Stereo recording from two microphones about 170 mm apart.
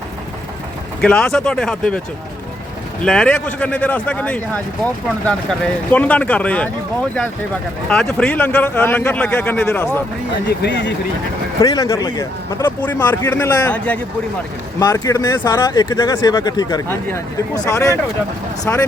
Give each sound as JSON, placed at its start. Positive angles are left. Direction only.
{"t": 1.0, "sound": "speech", "side_deg": 5}
{"t": 3.0, "sound": "a man's voice", "side_deg": 5}
{"t": 7.9, "sound": "a man's voice", "side_deg": 5}
{"t": 10.6, "sound": "speech", "side_deg": 90}
{"t": 11.6, "sound": "a man's voice", "side_deg": 20}
{"t": 14.8, "sound": "a man's voice", "side_deg": 20}